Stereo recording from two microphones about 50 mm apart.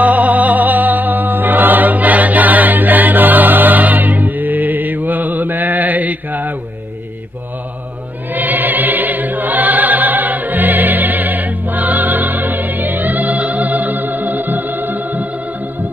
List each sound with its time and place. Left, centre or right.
0.0 s music: right
8.3 s music: right